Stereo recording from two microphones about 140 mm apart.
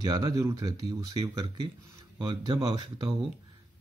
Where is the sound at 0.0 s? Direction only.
25° right (ahead or behind).